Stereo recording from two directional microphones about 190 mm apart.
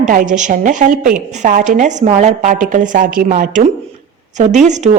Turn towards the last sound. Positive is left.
turn(degrees=-40)  # may be behind; listen again after turning